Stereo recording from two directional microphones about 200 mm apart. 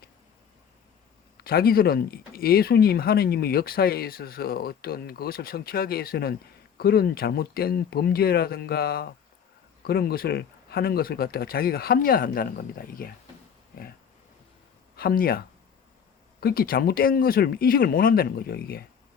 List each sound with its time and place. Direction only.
1.4 s speech: 50° left (ahead or behind)
14.9 s speech: 50° left (ahead or behind)